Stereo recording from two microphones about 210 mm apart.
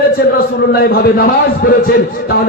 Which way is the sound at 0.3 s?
45° left (ahead or behind).